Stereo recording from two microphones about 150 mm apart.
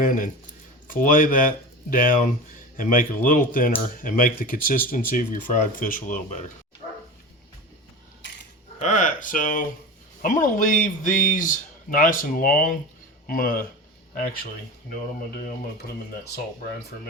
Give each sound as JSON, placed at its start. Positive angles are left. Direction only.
{"t": 0.0, "sound": "speech", "side_deg": 65}
{"t": 8.8, "sound": "speech", "side_deg": 55}